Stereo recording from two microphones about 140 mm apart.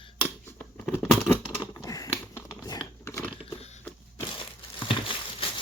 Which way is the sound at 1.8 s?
25° left (ahead or behind).